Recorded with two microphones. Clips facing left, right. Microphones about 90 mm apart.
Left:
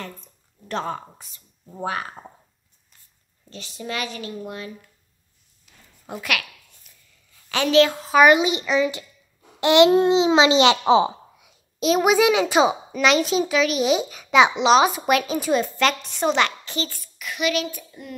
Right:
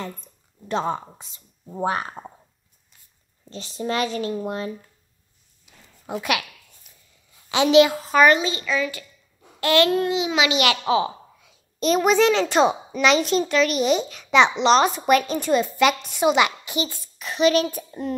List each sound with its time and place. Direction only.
0.0 s speech: 15° right (ahead or behind)
3.4 s speech: 35° right (ahead or behind)
5.7 s a sound: 15° right (ahead or behind)
6.1 s speech: 20° right (ahead or behind)
6.8 s biting: 20° right (ahead or behind)
7.3 s a woman's voice: 20° right (ahead or behind)
7.9 s a child's voice: centre (ahead or behind); by 11.5 s 20° left (ahead or behind)
11.8 s a child's voice: 5° left (ahead or behind); by 18.1 s 35° right (ahead or behind)